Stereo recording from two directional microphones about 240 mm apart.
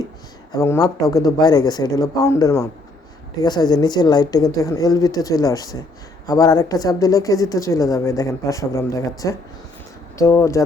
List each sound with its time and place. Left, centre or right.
0.5 s speech: centre